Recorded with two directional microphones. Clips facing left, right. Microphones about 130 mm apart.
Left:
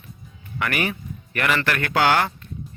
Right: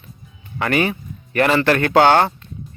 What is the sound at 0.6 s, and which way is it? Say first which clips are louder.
A man's voice: right 6 dB; 25° right (ahead or behind).